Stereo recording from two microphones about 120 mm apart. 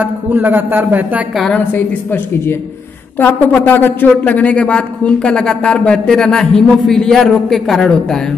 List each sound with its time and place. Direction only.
0.0 s a man's voice: 15° right (ahead or behind)
1.3 s a woman's voice: centre (ahead or behind)
3.2 s a man's voice: 15° left (ahead or behind)